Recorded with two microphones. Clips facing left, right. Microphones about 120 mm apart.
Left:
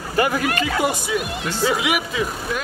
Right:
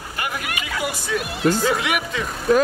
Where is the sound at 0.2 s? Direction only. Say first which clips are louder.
Left 9 dB; 40° left (ahead or behind).